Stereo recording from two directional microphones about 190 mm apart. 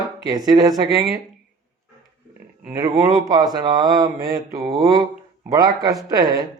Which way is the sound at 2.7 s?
20° right (ahead or behind).